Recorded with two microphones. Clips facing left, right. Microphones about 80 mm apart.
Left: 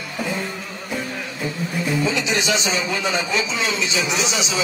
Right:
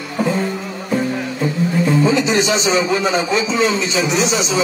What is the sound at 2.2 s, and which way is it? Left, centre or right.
A man's voice, right.